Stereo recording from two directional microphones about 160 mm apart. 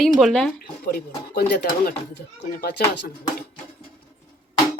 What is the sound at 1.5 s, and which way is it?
Speech, 80° left.